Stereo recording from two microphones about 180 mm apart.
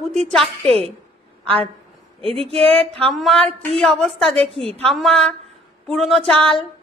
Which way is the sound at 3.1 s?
Centre (ahead or behind).